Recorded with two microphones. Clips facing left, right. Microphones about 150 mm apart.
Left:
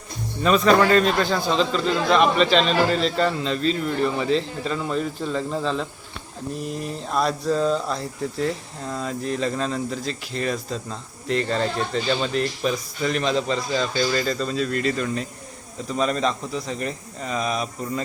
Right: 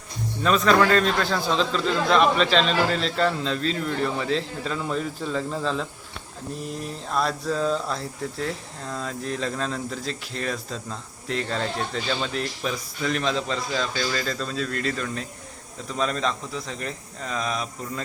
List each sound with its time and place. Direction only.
0.4 s a man's voice: centre (ahead or behind)